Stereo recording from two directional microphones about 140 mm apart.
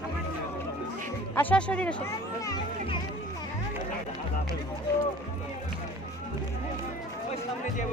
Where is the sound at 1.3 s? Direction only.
10° left (ahead or behind).